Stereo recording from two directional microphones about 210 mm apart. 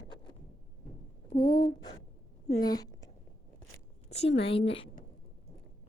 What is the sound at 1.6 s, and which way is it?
A woman's voice, 25° left (ahead or behind).